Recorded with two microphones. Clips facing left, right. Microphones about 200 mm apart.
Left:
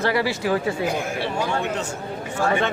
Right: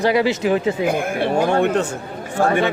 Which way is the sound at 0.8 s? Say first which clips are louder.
Right 5 dB; 55° right (ahead or behind).